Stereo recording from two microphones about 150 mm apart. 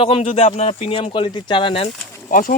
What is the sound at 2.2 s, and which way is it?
Speech, 65° left (ahead or behind).